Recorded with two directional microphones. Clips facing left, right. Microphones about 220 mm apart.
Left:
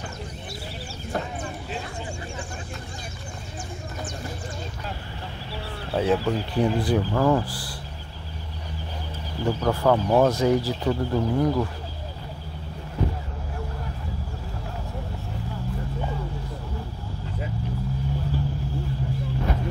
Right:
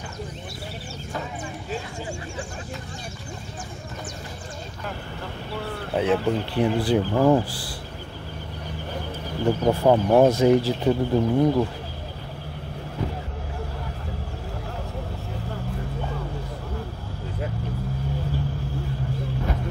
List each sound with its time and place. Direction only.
5.9 s speech: 20° right (ahead or behind)
6.5 s speech: 5° right (ahead or behind)
6.9 s speech: 25° right (ahead or behind)
9.4 s speech: 25° right (ahead or behind)